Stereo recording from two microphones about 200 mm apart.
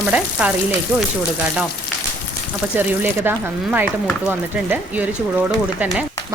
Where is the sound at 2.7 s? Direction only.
10° right (ahead or behind).